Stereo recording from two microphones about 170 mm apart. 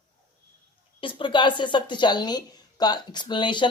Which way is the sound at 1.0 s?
30° left (ahead or behind).